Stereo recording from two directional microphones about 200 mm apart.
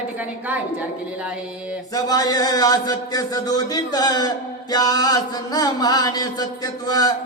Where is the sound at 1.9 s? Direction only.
20° left (ahead or behind).